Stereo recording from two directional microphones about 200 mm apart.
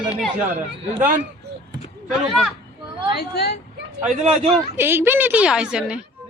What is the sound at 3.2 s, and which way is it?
Speech, 55° left (ahead or behind).